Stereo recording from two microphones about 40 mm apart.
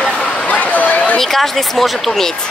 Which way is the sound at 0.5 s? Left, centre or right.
Left.